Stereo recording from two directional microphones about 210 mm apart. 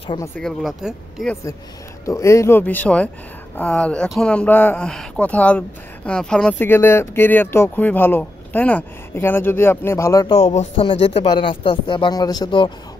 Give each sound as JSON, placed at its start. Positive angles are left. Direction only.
{"t": 0.0, "sound": "speech", "side_deg": 25}
{"t": 0.4, "sound": "speech", "side_deg": 0}
{"t": 2.0, "sound": "speech", "side_deg": 15}
{"t": 10.3, "sound": "speech", "side_deg": 30}